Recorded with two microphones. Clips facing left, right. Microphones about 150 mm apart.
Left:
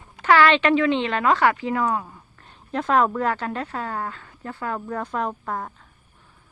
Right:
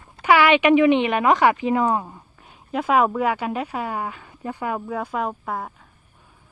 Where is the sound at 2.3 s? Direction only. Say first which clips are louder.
Right 1 dB; 10° right (ahead or behind).